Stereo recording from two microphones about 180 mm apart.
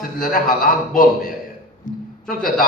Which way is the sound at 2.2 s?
50° left (ahead or behind).